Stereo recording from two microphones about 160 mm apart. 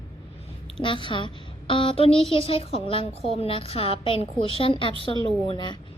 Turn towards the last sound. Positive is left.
turn(degrees=30)  # may be behind; listen again after turning